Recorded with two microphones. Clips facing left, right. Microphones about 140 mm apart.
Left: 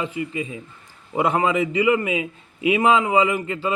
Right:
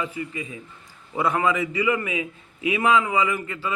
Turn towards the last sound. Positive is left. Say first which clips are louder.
# left 4 dB
turn(degrees=25)  # may be behind; listen again after turning